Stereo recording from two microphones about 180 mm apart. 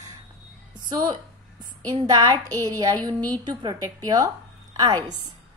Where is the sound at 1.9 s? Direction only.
20° right (ahead or behind).